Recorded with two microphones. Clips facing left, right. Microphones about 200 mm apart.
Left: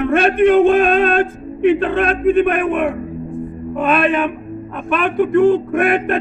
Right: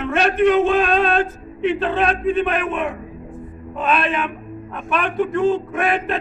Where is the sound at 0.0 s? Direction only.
55° left (ahead or behind).